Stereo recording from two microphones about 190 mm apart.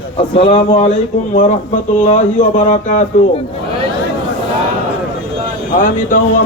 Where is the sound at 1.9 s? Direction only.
40° left (ahead or behind).